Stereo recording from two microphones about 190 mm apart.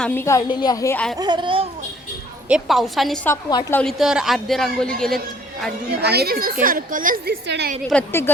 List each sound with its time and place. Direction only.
0.0 s a woman's voice: 10° left (ahead or behind)
1.1 s speech: 20° right (ahead or behind)
2.5 s speech: centre (ahead or behind)
5.9 s a woman's voice: 60° right (ahead or behind)
7.4 s a woman's voice: 65° right (ahead or behind)
7.9 s speech: 5° left (ahead or behind)